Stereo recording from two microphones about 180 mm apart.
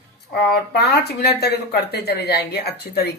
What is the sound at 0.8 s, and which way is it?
Speech, 65° left (ahead or behind).